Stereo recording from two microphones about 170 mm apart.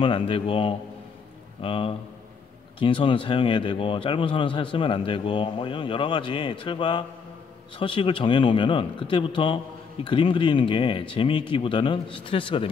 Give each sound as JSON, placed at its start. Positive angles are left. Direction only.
{"t": 0.0, "sound": "speech", "side_deg": 30}